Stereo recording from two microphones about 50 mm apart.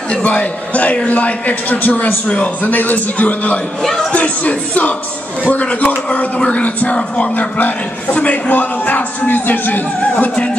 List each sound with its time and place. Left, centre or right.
0.1 s speech: left
2.6 s speech: left